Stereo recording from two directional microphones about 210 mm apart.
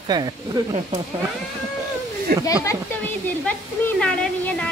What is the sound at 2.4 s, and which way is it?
Speech, 15° left (ahead or behind).